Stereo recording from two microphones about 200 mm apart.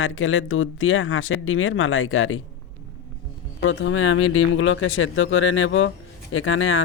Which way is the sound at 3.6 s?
70° left (ahead or behind).